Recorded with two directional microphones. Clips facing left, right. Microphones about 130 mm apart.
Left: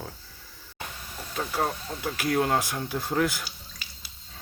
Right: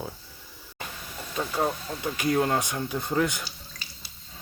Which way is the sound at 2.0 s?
5° left (ahead or behind).